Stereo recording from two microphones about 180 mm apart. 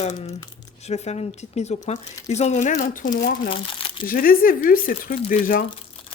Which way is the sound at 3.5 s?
30° left (ahead or behind).